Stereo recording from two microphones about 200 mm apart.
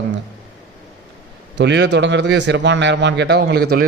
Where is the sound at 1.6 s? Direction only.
60° right (ahead or behind).